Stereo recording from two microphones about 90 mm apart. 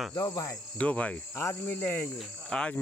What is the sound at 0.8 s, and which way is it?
Speech, 15° left (ahead or behind).